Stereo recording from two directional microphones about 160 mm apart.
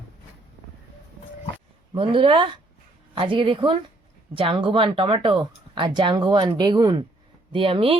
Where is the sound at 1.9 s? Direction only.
35° right (ahead or behind).